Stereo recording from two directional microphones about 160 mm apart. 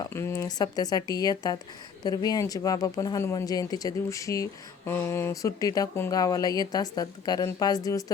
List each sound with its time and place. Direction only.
0.0 s speech: 15° left (ahead or behind)